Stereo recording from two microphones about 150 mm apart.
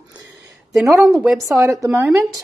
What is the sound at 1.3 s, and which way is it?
Speech, 20° right (ahead or behind).